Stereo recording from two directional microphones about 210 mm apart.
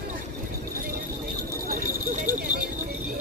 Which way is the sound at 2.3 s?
40° right (ahead or behind).